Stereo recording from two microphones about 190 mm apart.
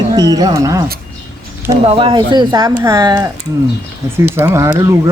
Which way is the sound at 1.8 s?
30° right (ahead or behind).